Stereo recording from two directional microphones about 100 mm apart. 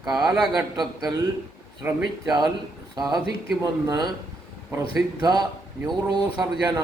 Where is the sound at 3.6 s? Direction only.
45° right (ahead or behind).